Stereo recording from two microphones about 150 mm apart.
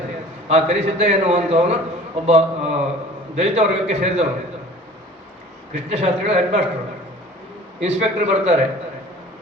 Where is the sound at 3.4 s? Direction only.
45° right (ahead or behind).